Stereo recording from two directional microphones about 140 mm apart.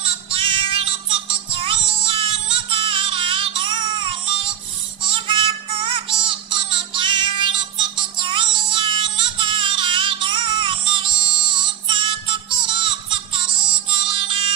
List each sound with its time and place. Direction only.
0.0 s music: 40° right (ahead or behind)